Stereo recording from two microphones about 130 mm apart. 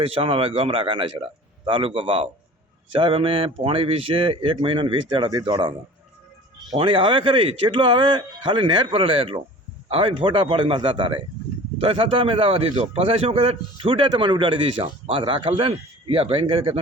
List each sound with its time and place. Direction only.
0.0 s a man's voice: 45° right (ahead or behind)
6.7 s a man's voice: 40° right (ahead or behind)